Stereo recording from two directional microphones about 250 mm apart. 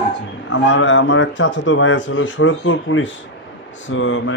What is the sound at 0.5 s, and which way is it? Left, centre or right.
Speech, left.